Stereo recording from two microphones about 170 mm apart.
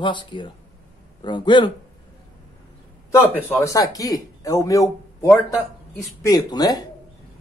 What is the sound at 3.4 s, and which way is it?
Speech, 15° left (ahead or behind).